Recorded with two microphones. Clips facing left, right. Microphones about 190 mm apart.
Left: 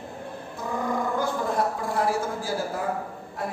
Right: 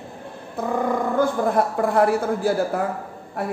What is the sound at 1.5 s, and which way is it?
A man's voice, 60° right (ahead or behind).